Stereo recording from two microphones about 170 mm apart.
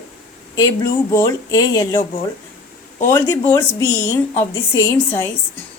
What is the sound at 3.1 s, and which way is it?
Speech, 15° left (ahead or behind).